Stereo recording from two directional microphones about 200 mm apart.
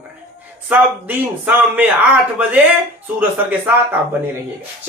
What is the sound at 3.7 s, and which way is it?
Speech, 10° right (ahead or behind).